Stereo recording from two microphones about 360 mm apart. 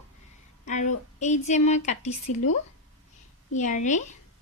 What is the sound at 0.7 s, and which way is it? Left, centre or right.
A woman's voice, centre.